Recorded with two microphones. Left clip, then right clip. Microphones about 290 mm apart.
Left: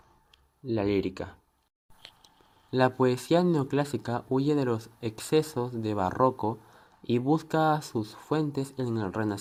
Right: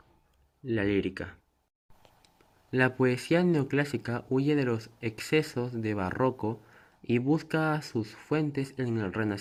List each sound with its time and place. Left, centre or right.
0.7 s speech: left
2.7 s speech: left